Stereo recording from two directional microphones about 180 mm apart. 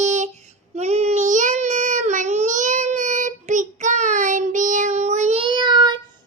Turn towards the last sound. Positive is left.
turn(degrees=-25)  # may be behind; listen again after turning